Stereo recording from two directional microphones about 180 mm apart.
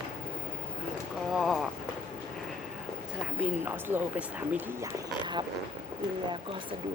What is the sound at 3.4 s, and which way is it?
Speech, 10° right (ahead or behind).